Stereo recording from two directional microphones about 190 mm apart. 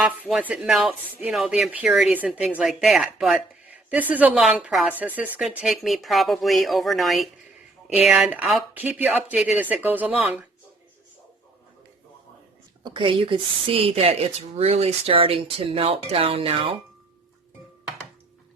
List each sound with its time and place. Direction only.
0.0 s a woman's voice: 5° right (ahead or behind)
12.8 s speech: 25° right (ahead or behind)